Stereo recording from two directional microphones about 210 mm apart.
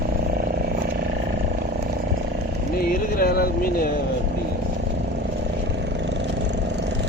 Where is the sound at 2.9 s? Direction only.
45° left (ahead or behind).